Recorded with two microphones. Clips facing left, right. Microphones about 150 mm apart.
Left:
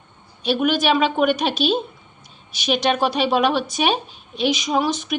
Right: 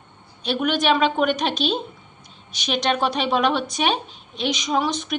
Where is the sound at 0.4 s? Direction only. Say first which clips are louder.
Left 2 dB; 5° left (ahead or behind).